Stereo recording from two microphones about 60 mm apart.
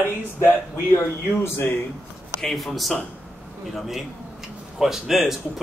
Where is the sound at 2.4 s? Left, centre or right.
Centre.